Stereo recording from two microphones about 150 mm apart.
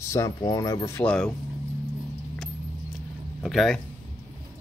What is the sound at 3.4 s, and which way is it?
Speech, centre (ahead or behind).